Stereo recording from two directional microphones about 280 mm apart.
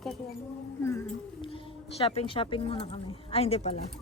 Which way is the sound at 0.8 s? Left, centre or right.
Centre.